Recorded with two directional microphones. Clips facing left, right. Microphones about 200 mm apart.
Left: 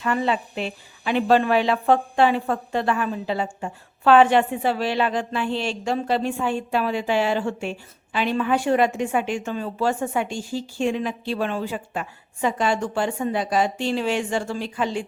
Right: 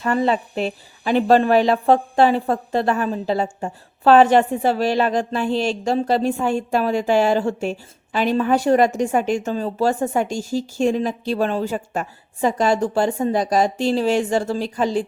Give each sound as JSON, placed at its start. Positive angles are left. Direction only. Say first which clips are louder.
{"t": 0.0, "sound": "speech", "louder": "right 4 dB", "side_deg": -40}